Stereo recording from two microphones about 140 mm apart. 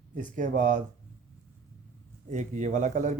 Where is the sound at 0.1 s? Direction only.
65° right (ahead or behind).